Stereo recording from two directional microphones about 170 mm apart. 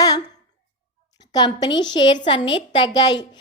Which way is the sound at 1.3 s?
25° left (ahead or behind).